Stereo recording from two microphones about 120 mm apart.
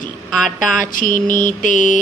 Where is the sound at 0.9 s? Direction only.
90° left.